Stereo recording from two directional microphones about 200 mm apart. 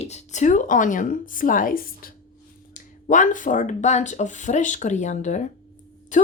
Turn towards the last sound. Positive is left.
turn(degrees=40)  # may be behind; listen again after turning